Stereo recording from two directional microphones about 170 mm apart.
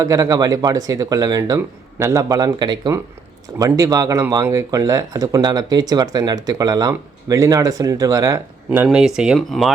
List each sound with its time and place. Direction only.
0.0 s speech: 20° right (ahead or behind); by 9.7 s centre (ahead or behind)